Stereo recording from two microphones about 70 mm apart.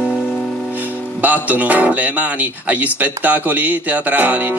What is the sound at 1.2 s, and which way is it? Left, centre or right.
Speech, right.